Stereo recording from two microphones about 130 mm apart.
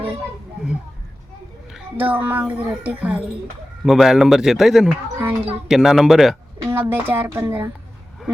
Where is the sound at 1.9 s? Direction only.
15° right (ahead or behind).